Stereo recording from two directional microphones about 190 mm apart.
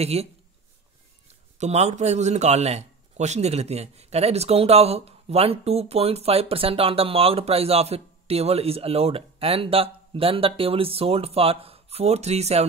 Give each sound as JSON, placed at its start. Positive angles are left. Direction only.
{"t": 0.0, "sound": "speech", "side_deg": -35}
{"t": 1.6, "sound": "speech", "side_deg": -35}